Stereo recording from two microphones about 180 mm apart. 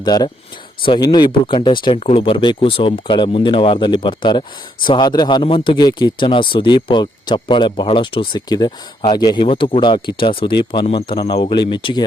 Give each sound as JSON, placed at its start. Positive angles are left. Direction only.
{"t": 0.0, "sound": "speech", "side_deg": 20}